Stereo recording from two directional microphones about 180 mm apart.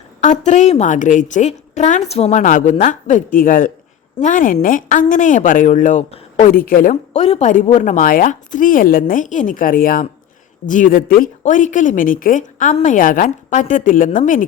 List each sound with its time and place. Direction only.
0.2 s a woman's voice: 40° left (ahead or behind)